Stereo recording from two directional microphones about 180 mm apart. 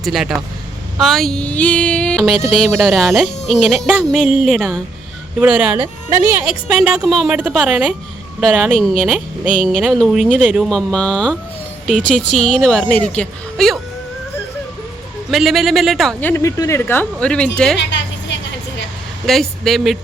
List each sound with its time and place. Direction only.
0.0 s speech: centre (ahead or behind)
12.4 s speech: 5° left (ahead or behind)
15.3 s speech: centre (ahead or behind)
16.3 s a woman's voice: 15° left (ahead or behind)
17.7 s a sound: 75° left (ahead or behind)
19.2 s speech: centre (ahead or behind)